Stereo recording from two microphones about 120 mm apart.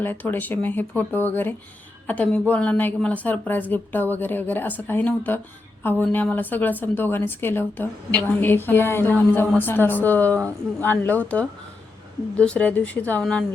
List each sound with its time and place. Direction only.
0.0 s a woman's voice: 15° left (ahead or behind)